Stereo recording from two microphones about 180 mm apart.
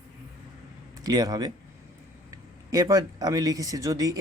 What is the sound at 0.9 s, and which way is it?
Speech, 20° right (ahead or behind).